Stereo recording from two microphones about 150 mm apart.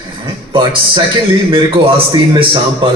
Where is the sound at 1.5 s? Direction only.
35° right (ahead or behind).